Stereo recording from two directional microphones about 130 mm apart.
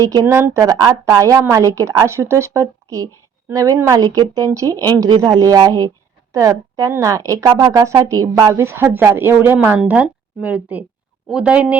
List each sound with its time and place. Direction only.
0.0 s a woman's voice: 25° right (ahead or behind)